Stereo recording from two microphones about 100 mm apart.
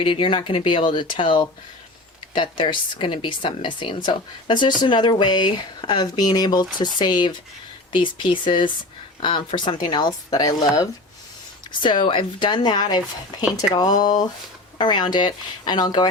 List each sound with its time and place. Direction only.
0.0 s a woman's voice: 60° left (ahead or behind); by 10.8 s 35° left (ahead or behind)
11.8 s a woman's voice: 55° left (ahead or behind)